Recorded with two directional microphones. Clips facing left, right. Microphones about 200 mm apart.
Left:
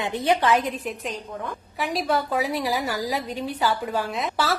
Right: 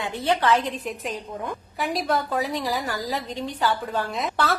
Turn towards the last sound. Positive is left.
turn(degrees=0)  # may be behind; listen again after turning